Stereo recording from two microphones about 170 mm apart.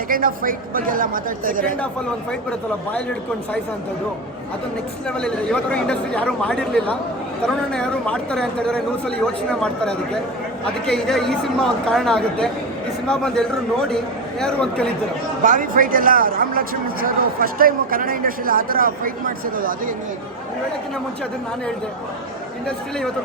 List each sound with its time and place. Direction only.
0.1 s speech: 55° right (ahead or behind)
5.0 s a man's voice: 5° left (ahead or behind)
14.4 s a man's voice: 5° left (ahead or behind)
15.4 s a man's voice: 55° right (ahead or behind)